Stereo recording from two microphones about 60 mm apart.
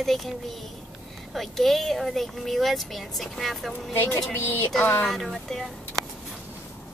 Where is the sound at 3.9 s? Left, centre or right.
Left.